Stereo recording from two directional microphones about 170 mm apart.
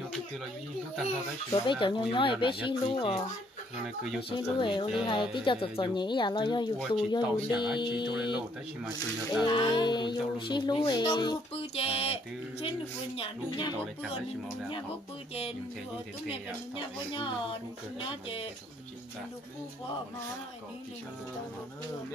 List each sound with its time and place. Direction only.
1.5 s speech: 30° left (ahead or behind)
3.8 s speech: centre (ahead or behind)
4.3 s speech: 30° left (ahead or behind)
9.4 s speech: 25° left (ahead or behind)
16.7 s speech: 30° left (ahead or behind)